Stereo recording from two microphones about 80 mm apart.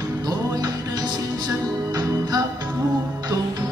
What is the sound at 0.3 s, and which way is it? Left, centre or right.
Music, right.